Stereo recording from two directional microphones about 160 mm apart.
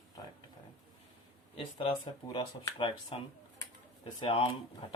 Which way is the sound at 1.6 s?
35° left (ahead or behind).